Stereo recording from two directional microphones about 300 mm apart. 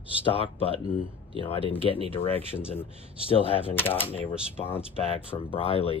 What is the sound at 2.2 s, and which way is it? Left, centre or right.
Speech, centre.